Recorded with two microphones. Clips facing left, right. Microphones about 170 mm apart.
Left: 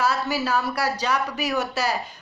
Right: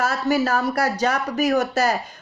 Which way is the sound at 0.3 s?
45° right (ahead or behind).